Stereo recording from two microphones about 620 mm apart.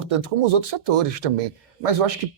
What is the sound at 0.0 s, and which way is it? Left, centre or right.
Speech, right.